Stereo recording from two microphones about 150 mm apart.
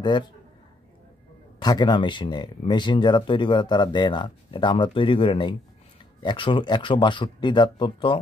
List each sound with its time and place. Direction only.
0.0 s speech: 30° left (ahead or behind)
1.6 s speech: 30° left (ahead or behind)